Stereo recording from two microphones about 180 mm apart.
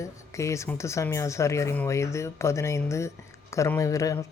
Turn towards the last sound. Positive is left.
turn(degrees=20)  # may be behind; listen again after turning